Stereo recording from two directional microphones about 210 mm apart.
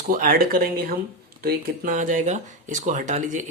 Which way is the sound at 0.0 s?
40° right (ahead or behind).